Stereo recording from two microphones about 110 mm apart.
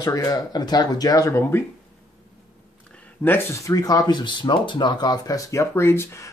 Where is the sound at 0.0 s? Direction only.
35° left (ahead or behind).